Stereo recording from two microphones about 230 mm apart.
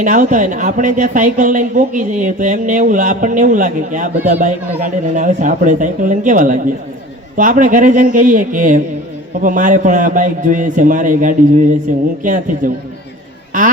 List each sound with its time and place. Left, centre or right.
0.0 s speech: right